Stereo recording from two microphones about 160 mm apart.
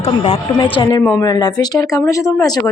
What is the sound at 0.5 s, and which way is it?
A woman's voice, 30° left (ahead or behind).